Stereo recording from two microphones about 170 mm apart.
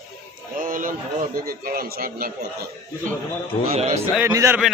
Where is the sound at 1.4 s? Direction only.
60° right (ahead or behind).